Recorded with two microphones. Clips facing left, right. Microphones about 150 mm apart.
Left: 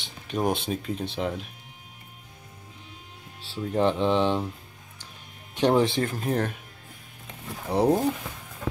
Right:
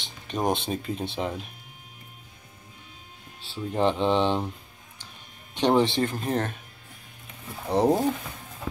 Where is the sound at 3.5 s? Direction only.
Centre (ahead or behind).